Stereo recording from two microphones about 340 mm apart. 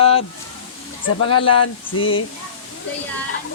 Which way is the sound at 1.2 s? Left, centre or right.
Centre.